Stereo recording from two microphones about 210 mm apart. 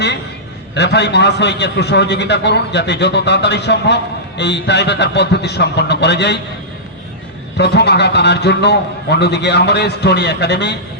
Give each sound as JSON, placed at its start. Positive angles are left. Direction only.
{"t": 0.7, "sound": "a man's voice", "side_deg": 55}
{"t": 7.5, "sound": "a man's voice", "side_deg": 55}